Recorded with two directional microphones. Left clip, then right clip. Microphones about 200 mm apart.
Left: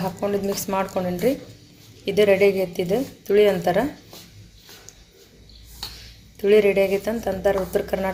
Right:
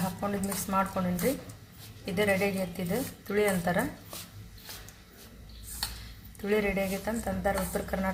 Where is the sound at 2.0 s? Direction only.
25° left (ahead or behind).